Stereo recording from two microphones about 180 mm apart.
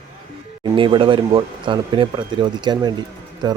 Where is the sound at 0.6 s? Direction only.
25° right (ahead or behind).